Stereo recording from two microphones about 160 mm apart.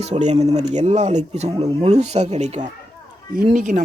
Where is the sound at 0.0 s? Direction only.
45° right (ahead or behind).